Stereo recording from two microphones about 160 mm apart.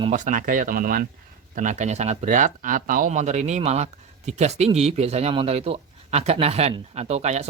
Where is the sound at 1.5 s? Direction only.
50° right (ahead or behind).